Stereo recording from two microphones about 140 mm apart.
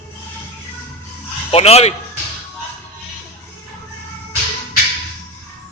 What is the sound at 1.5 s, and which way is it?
Speech, 45° left (ahead or behind).